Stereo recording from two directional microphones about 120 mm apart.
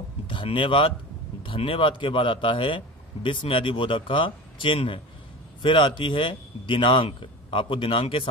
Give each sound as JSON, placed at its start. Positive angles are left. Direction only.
{"t": 0.3, "sound": "speech", "side_deg": 45}